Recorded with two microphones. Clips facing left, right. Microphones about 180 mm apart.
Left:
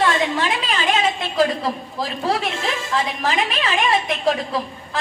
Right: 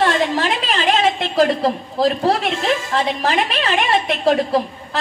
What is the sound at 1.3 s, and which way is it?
Speech, 45° right (ahead or behind).